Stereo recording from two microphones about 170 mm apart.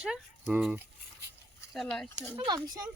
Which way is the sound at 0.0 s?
5° right (ahead or behind).